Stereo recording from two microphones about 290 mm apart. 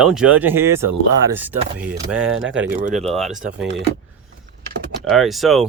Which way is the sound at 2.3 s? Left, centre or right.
Right.